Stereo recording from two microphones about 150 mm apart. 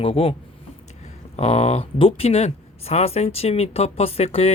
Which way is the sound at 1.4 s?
40° left (ahead or behind).